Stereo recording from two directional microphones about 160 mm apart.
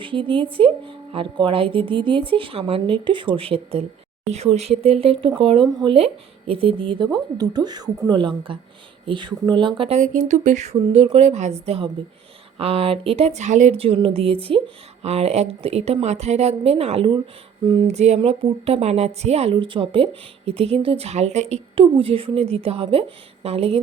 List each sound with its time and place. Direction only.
0.0 s a woman's voice: 30° right (ahead or behind)
10.0 s a woman's voice: 50° right (ahead or behind)